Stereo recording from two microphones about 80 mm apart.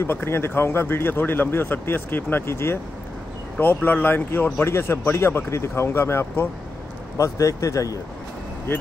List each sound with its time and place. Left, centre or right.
0.0 s speech: left